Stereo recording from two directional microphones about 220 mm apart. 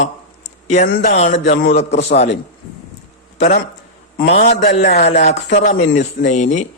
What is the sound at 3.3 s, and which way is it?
A man's voice, 30° left (ahead or behind).